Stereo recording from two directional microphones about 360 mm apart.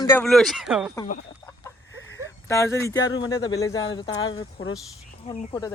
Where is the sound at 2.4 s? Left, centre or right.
Centre.